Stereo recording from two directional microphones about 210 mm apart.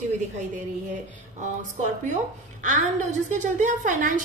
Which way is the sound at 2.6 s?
35° right (ahead or behind).